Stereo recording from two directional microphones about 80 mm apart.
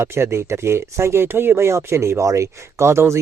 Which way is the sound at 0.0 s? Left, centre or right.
Right.